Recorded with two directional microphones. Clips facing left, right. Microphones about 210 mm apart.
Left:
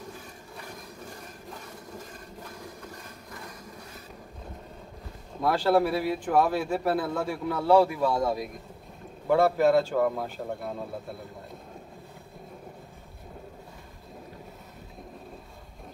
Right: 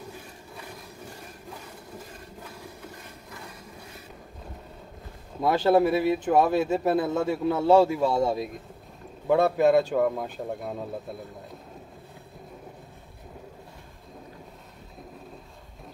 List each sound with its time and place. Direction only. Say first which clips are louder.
5.4 s a man's voice: right 2 dB; 20° right (ahead or behind)